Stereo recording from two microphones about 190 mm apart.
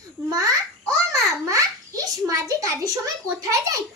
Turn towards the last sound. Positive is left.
turn(degrees=-15)  # may be behind; listen again after turning